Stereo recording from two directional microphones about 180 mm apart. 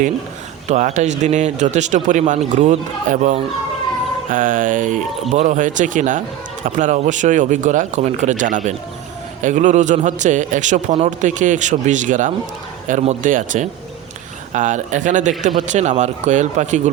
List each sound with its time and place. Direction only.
0.7 s a man's voice: 40° right (ahead or behind)